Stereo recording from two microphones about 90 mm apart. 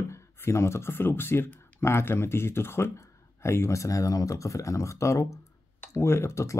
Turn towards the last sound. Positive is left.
turn(degrees=35)  # may be behind; listen again after turning